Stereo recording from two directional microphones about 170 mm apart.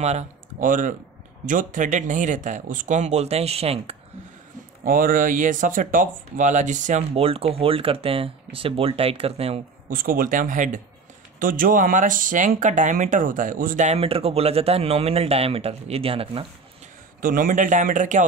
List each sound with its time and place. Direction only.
0.0 s speech: 40° right (ahead or behind)
4.8 s speech: 55° right (ahead or behind); by 9.6 s 35° right (ahead or behind)
9.8 s speech: 55° right (ahead or behind); by 16.4 s 35° right (ahead or behind)
17.2 s speech: 55° right (ahead or behind)